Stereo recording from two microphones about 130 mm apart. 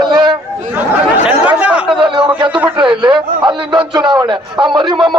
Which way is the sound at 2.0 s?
40° right (ahead or behind).